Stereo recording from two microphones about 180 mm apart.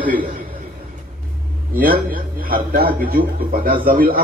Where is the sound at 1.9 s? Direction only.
55° right (ahead or behind).